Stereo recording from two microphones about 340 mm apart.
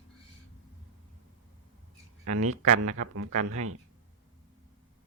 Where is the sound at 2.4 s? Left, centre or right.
Right.